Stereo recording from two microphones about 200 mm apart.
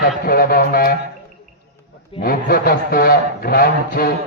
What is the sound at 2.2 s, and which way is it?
A man's voice, 50° left (ahead or behind).